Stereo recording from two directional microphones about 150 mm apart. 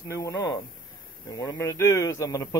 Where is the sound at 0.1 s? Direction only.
20° left (ahead or behind).